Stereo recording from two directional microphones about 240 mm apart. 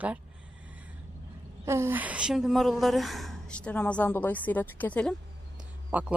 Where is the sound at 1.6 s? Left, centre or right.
Centre.